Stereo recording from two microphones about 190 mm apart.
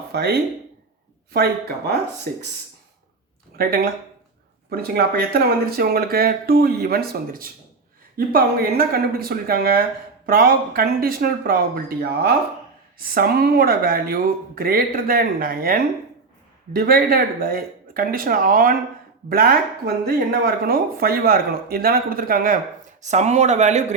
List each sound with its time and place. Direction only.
0.1 s speech: 55° right (ahead or behind)
3.6 s speech: 50° right (ahead or behind)
23.0 s speech: 35° right (ahead or behind)